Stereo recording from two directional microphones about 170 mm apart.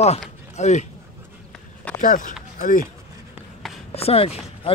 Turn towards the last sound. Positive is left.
turn(degrees=35)  # may be behind; listen again after turning